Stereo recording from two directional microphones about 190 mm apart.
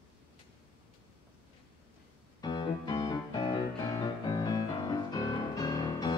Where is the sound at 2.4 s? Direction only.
25° left (ahead or behind).